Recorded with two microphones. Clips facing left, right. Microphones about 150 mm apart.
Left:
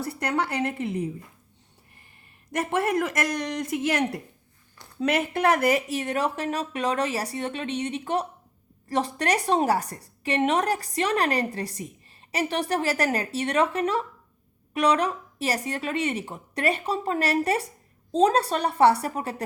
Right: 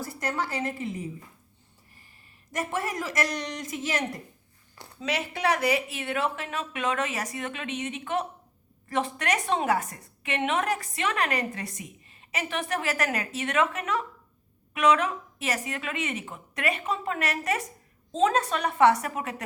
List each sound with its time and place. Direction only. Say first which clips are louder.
0.0 s speech: left 4 dB; 65° left (ahead or behind)
2.5 s speech: left 6 dB; 65° left (ahead or behind); by 19.4 s 35° left (ahead or behind)